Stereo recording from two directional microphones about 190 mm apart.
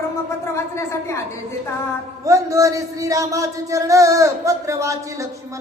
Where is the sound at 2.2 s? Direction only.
15° right (ahead or behind).